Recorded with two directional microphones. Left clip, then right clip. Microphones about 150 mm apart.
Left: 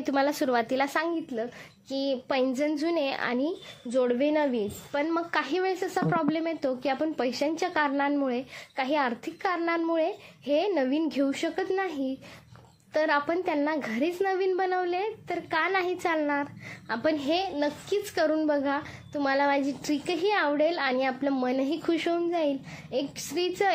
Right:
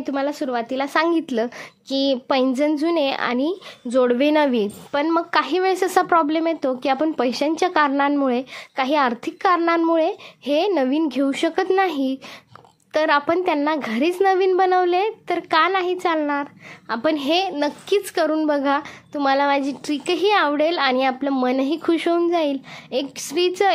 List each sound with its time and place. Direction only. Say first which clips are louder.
0.0 s speech: right 2 dB; 10° right (ahead or behind)
0.9 s speech: right 10 dB; 45° right (ahead or behind); by 5.8 s 25° right (ahead or behind)
5.8 s speech: right 11 dB; 40° right (ahead or behind)
12.9 s speech: right 7 dB; 30° right (ahead or behind)
15.7 s a woman's voice: right 6 dB; 20° right (ahead or behind)